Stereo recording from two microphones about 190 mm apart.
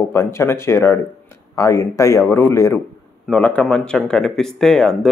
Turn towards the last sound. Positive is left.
turn(degrees=0)  # may be behind; listen again after turning